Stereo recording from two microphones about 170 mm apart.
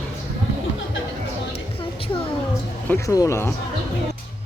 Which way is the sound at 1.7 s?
35° left (ahead or behind).